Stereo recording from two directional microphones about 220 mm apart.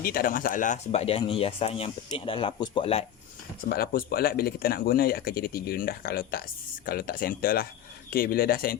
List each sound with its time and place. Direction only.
0.0 s speech: 40° left (ahead or behind); by 3.0 s 25° left (ahead or behind)
3.7 s speech: 45° left (ahead or behind)